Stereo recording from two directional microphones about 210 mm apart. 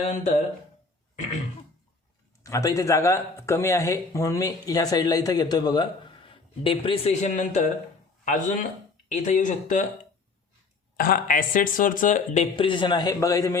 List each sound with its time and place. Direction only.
0.0 s speech: 30° left (ahead or behind)
2.4 s speech: 15° left (ahead or behind); by 9.8 s 35° left (ahead or behind)
10.9 s speech: 45° left (ahead or behind); by 13.6 s 15° left (ahead or behind)